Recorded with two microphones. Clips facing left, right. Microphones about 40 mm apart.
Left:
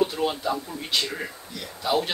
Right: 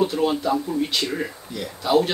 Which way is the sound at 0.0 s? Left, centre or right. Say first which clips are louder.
Right 3 dB; centre.